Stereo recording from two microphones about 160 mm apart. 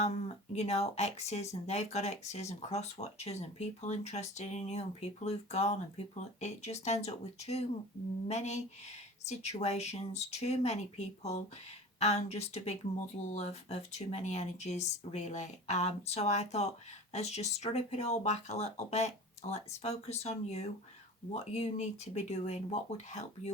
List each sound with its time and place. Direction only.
0.5 s speech: 40° left (ahead or behind)